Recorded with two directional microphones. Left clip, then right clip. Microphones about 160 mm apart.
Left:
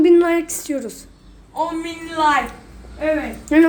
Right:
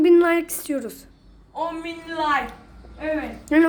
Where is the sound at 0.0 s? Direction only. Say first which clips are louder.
Left 2 dB; 20° right (ahead or behind).